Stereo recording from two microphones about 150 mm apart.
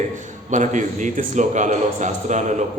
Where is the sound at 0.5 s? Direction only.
55° right (ahead or behind).